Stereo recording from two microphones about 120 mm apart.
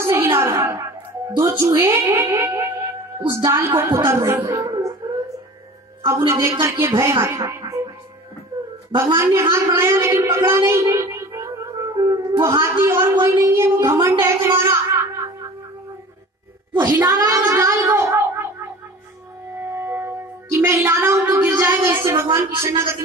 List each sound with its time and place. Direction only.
0.0 s a sound: 20° right (ahead or behind)
1.3 s a woman's voice: 25° right (ahead or behind)
6.0 s a woman's voice: 25° right (ahead or behind)
8.9 s a woman's voice: 25° right (ahead or behind)
17.2 s a woman's voice: 25° right (ahead or behind)
19.6 s speech: 20° right (ahead or behind)